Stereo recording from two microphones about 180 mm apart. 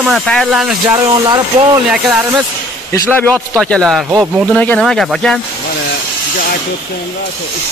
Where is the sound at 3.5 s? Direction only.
5° left (ahead or behind).